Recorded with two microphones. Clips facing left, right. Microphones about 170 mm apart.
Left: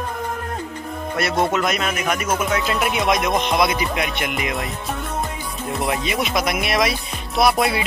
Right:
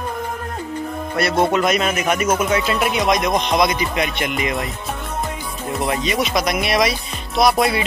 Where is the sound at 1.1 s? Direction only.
Centre (ahead or behind).